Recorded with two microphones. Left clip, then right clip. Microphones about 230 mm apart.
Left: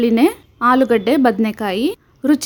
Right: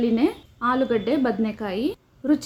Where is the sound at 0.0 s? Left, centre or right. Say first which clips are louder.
Left 8 dB; left.